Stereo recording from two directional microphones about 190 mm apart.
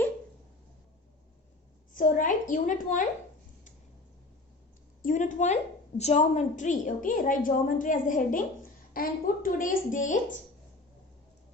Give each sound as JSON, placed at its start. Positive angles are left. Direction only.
{"t": 1.9, "sound": "a woman's voice", "side_deg": 45}
{"t": 5.0, "sound": "a woman's voice", "side_deg": 40}